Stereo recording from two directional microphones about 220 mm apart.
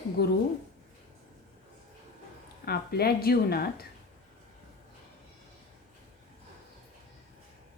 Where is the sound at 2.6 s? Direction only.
45° left (ahead or behind).